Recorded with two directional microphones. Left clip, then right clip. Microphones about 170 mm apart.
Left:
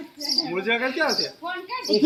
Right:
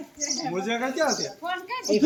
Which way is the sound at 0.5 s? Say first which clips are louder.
Left 4 dB; 90° right.